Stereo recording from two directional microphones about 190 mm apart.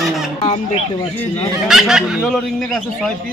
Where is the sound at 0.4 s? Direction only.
35° left (ahead or behind).